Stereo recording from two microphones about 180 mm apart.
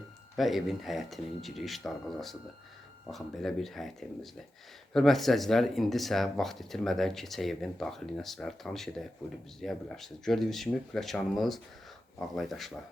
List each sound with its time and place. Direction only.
0.3 s speech: centre (ahead or behind)